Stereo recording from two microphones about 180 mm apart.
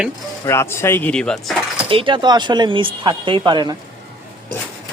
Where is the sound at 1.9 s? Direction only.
30° right (ahead or behind).